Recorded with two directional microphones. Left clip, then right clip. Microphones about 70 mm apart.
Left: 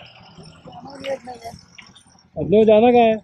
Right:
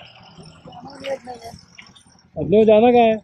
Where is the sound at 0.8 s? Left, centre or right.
Right.